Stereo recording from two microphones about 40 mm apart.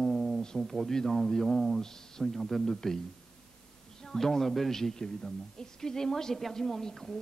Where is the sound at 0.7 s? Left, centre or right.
Centre.